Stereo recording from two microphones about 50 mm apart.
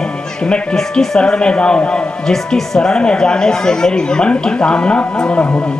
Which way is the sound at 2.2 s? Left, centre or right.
Centre.